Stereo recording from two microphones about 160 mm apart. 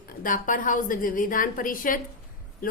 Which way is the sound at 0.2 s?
55° left (ahead or behind).